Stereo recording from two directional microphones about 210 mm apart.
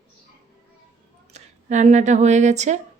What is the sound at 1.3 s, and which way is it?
Speech, 35° right (ahead or behind).